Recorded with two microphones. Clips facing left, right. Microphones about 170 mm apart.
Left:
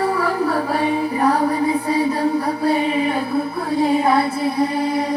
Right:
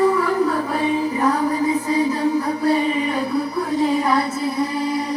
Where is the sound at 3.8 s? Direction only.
30° left (ahead or behind).